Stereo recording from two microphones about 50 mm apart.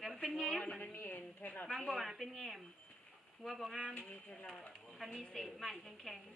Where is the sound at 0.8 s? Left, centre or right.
Left.